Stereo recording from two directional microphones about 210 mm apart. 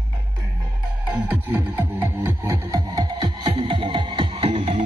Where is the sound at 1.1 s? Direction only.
10° right (ahead or behind); by 4.8 s 25° right (ahead or behind).